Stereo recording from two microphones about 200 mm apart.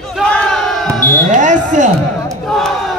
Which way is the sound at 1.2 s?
40° right (ahead or behind).